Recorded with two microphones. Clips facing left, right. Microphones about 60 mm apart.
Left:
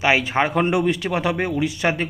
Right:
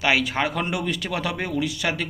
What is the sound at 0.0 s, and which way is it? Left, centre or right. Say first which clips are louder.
Speech: left 3 dB; left.